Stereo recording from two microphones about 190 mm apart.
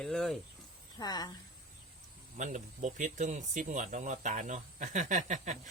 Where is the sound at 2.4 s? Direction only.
40° right (ahead or behind).